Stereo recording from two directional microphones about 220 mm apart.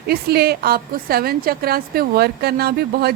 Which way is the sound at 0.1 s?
45° right (ahead or behind).